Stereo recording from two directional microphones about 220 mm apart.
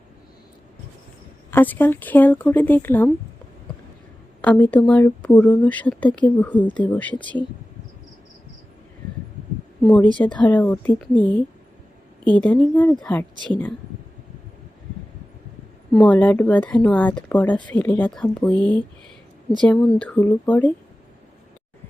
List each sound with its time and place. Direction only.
1.5 s speech: 10° left (ahead or behind)
4.4 s speech: 5° left (ahead or behind)
9.8 s a woman's voice: 5° left (ahead or behind)
13.3 s speech: 20° right (ahead or behind)
15.9 s a woman's voice: 5° left (ahead or behind)